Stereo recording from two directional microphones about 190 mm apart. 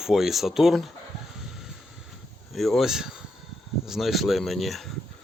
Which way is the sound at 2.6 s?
Centre (ahead or behind).